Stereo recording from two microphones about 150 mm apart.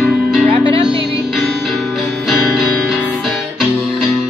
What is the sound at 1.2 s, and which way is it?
Music, centre (ahead or behind).